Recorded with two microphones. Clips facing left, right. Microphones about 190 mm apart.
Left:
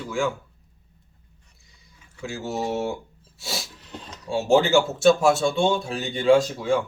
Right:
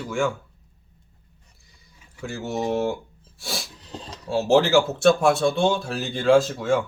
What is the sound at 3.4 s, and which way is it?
Sneeze, centre (ahead or behind).